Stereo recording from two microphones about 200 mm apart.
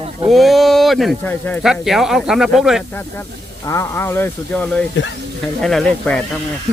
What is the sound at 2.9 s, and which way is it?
Speech, 15° left (ahead or behind).